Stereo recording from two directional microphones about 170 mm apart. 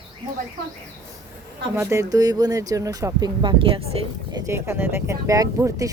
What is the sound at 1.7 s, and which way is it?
Speech, 15° right (ahead or behind).